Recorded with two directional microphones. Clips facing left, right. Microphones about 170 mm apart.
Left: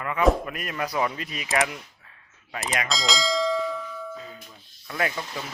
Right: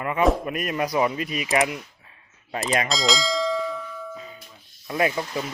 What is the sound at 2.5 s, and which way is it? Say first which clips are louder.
Speech: right 5 dB; 30° right (ahead or behind).